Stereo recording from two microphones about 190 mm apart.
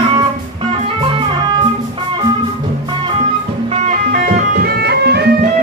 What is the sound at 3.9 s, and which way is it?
Music, 50° right (ahead or behind).